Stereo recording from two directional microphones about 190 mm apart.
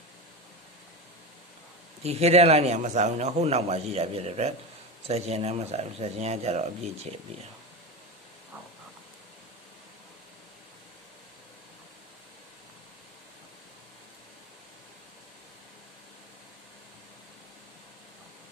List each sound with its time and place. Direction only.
2.0 s a man's voice: 35° right (ahead or behind)